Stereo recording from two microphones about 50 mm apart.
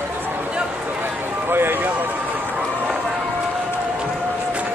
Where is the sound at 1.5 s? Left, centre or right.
Right.